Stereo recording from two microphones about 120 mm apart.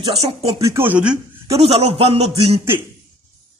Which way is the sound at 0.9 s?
10° right (ahead or behind).